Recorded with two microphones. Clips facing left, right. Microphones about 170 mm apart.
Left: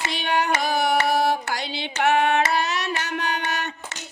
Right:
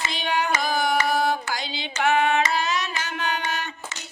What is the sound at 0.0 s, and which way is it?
Carnatic music, 65° left (ahead or behind).